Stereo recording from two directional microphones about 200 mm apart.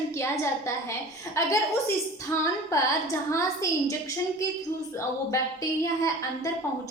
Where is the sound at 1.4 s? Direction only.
15° left (ahead or behind).